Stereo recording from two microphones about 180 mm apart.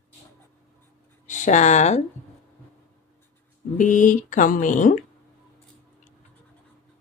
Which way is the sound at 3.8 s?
45° left (ahead or behind).